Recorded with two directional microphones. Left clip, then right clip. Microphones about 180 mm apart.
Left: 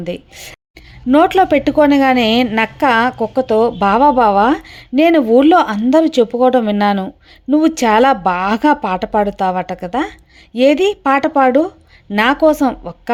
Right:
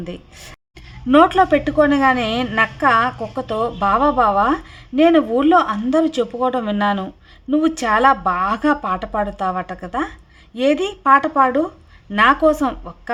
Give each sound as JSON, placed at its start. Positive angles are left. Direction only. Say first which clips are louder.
{"t": 0.0, "sound": "a woman's voice", "louder": "left 8 dB", "side_deg": 25}